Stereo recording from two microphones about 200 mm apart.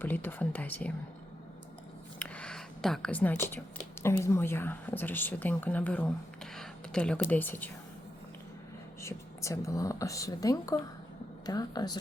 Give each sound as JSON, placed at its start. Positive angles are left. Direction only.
{"t": 0.0, "sound": "a woman's voice", "side_deg": 10}
{"t": 2.1, "sound": "a sound", "side_deg": 5}
{"t": 4.0, "sound": "a woman's voice", "side_deg": 15}
{"t": 9.0, "sound": "speech", "side_deg": 15}